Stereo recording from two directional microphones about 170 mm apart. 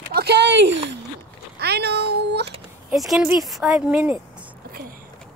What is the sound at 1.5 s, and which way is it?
Speech, 75° right (ahead or behind).